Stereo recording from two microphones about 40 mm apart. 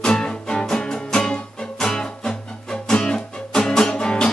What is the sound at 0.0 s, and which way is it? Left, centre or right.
Music, centre.